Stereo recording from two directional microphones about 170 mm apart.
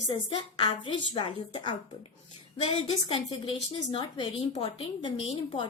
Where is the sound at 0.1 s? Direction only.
30° left (ahead or behind).